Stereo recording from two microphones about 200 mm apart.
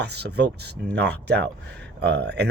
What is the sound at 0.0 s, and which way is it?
Speech, 55° right (ahead or behind).